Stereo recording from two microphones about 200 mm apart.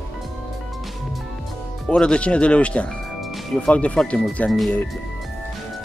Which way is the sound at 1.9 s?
5° left (ahead or behind).